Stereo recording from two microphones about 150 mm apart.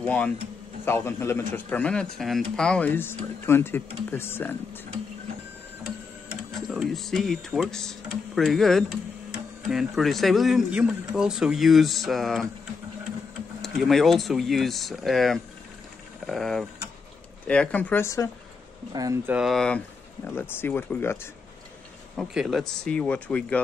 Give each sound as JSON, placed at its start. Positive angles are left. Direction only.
{"t": 0.0, "sound": "speech", "side_deg": 10}
{"t": 6.7, "sound": "speech", "side_deg": 0}
{"t": 13.6, "sound": "speech", "side_deg": 0}
{"t": 18.9, "sound": "speech", "side_deg": -25}
{"t": 19.3, "sound": "speech", "side_deg": 0}
{"t": 20.2, "sound": "speech", "side_deg": 15}
{"t": 22.1, "sound": "speech", "side_deg": -5}